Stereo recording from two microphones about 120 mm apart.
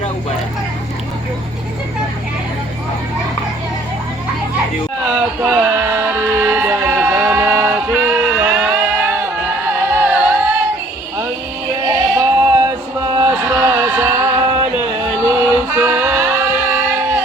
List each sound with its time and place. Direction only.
5.4 s music: 20° right (ahead or behind)
11.8 s a sound: 30° right (ahead or behind)
13.9 s music: 20° right (ahead or behind)
15.2 s singing: 20° right (ahead or behind)